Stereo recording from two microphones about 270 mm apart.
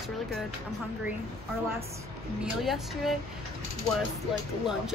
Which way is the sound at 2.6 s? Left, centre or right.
Centre.